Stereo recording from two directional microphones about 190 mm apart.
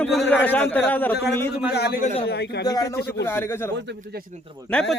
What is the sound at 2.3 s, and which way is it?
Speech, 60° left (ahead or behind).